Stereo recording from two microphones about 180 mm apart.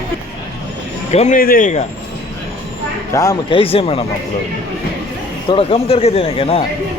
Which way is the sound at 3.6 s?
30° left (ahead or behind).